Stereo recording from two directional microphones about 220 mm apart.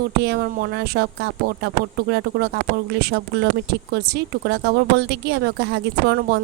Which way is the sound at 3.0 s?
45° right (ahead or behind).